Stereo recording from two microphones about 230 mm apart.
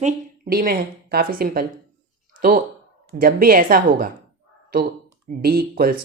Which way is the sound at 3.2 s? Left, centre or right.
Right.